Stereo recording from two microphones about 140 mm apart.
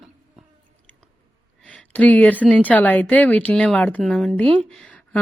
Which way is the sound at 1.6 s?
10° left (ahead or behind).